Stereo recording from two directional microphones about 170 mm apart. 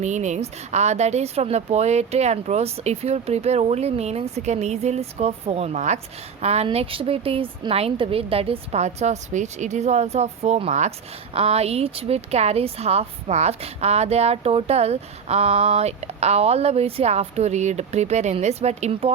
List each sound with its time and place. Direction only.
0.0 s speech: 45° right (ahead or behind)